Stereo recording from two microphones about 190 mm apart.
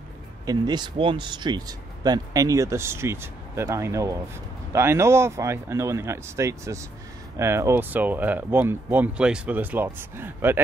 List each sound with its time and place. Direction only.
0.5 s speech: 20° right (ahead or behind)